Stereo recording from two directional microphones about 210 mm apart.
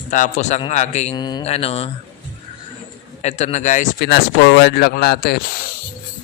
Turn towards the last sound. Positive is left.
turn(degrees=45)  # may be behind; listen again after turning